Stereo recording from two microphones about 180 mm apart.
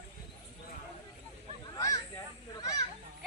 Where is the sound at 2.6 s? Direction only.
20° left (ahead or behind).